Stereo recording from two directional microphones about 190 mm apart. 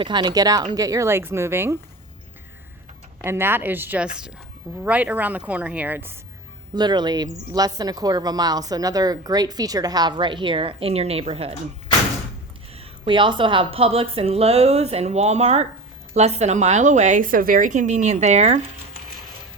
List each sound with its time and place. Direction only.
0.0 s speech: 25° right (ahead or behind)
3.2 s speech: 10° right (ahead or behind)
6.7 s speech: 20° right (ahead or behind)
12.7 s speech: 30° right (ahead or behind)